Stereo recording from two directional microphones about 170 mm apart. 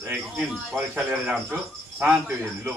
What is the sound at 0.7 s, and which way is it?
A man's voice, 10° right (ahead or behind).